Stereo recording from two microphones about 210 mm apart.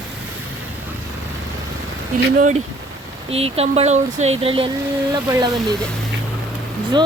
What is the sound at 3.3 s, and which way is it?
Speech, 30° right (ahead or behind).